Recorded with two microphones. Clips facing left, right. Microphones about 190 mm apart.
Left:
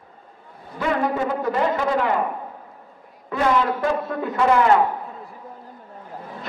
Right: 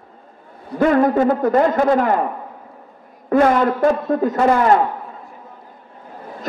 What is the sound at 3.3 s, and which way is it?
A man's voice, 50° right (ahead or behind).